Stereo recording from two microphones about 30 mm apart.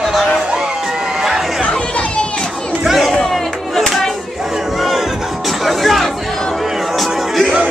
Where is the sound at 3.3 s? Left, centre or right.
Centre.